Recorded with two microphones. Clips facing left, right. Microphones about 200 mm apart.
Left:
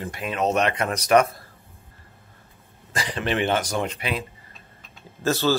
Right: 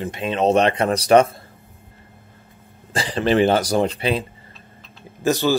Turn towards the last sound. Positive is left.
turn(degrees=-15)  # may be behind; listen again after turning